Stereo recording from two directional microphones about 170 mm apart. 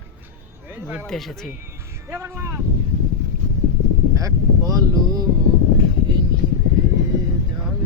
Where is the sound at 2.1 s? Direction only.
15° right (ahead or behind).